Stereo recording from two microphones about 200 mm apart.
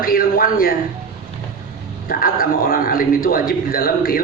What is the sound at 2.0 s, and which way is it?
A man's voice, 45° left (ahead or behind).